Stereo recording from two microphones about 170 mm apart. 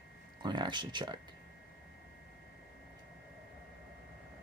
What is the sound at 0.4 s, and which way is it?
Speech, 25° right (ahead or behind).